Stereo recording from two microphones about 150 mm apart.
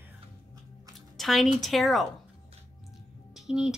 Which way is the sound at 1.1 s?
Centre (ahead or behind).